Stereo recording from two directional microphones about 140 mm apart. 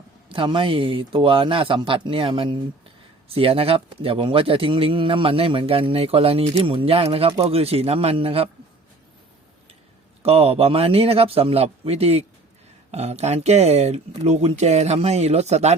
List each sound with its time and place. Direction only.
0.3 s speech: 35° right (ahead or behind)
10.2 s speech: 45° right (ahead or behind)